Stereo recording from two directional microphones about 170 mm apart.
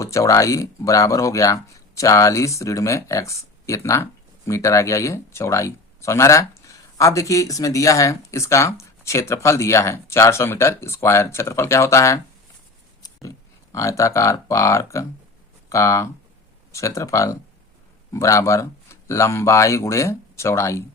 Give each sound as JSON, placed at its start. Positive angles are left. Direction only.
{"t": 0.0, "sound": "speech", "side_deg": 20}
{"t": 13.7, "sound": "speech", "side_deg": 20}